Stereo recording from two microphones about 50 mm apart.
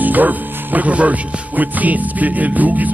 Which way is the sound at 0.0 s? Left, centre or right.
Right.